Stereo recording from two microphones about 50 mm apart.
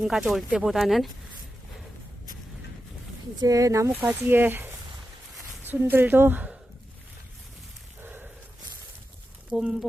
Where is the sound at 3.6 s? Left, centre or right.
Right.